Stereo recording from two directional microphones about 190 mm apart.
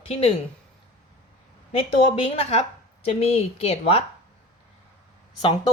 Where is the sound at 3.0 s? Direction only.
30° left (ahead or behind).